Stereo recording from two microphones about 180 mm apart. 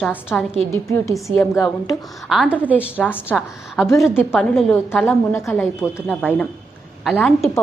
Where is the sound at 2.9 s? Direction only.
10° left (ahead or behind).